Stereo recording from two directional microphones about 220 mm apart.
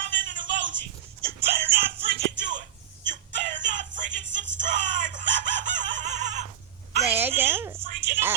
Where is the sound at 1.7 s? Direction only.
45° right (ahead or behind).